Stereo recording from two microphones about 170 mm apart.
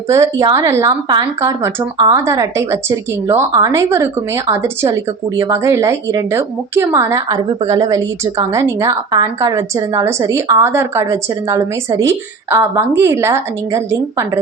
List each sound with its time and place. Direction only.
0.1 s a woman's voice: 20° right (ahead or behind)